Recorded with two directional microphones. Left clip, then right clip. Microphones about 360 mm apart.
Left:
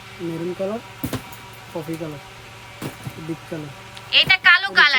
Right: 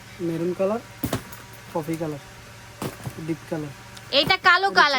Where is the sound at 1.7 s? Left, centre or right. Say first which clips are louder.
Right 2 dB; centre.